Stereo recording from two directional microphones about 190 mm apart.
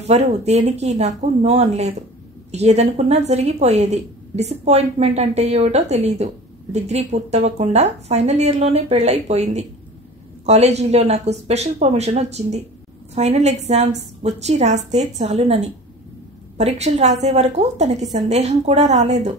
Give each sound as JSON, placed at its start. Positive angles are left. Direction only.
{"t": 0.1, "sound": "a woman's voice", "side_deg": -35}